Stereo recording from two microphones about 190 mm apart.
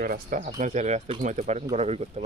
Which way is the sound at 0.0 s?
50° right (ahead or behind).